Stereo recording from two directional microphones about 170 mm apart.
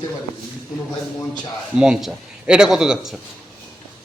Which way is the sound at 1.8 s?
5° right (ahead or behind).